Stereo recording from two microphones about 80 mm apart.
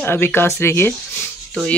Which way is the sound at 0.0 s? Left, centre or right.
Left.